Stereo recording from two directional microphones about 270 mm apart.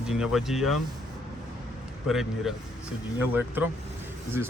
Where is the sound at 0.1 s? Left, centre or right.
Centre.